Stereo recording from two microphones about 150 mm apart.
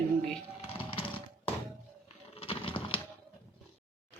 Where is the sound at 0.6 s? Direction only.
40° left (ahead or behind).